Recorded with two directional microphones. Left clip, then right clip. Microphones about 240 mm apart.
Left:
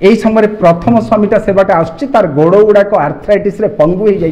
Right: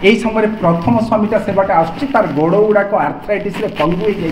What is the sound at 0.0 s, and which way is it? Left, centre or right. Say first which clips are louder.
A man's voice: left 4 dB; left.